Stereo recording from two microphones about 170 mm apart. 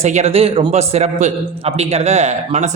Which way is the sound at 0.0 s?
40° right (ahead or behind).